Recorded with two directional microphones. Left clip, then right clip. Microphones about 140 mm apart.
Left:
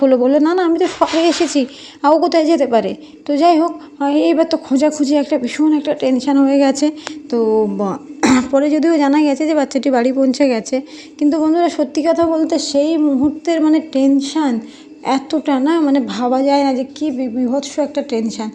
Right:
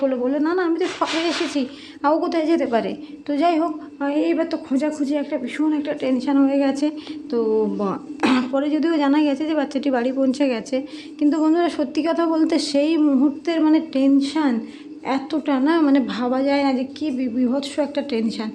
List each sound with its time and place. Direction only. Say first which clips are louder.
0.0 s a woman's voice: left 9 dB; 55° left (ahead or behind); by 3.7 s 40° left (ahead or behind)
4.0 s a woman's voice: left 7 dB; 50° left (ahead or behind); by 12.4 s 25° left (ahead or behind)
12.4 s a woman's voice: left 4 dB; 10° left (ahead or behind)
13.4 s a woman's voice: left 4 dB; 25° left (ahead or behind)
15.8 s a woman's voice: left 3 dB; 20° left (ahead or behind)